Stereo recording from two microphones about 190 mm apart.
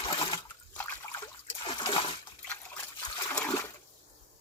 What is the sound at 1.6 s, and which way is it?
Water, 25° left (ahead or behind).